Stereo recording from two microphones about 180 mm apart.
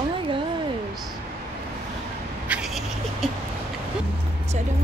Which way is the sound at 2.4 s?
5° right (ahead or behind).